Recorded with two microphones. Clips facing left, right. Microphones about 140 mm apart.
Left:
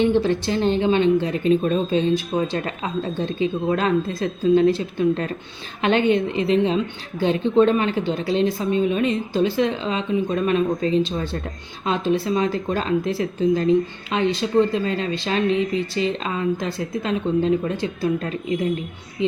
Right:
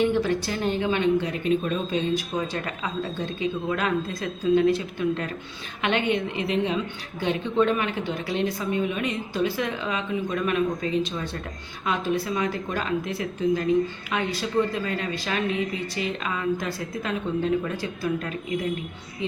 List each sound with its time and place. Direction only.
0.0 s a woman's voice: 30° left (ahead or behind)